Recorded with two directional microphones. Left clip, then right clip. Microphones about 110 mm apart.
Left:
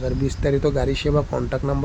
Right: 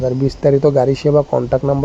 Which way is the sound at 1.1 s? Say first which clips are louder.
Right 9 dB; 25° left (ahead or behind).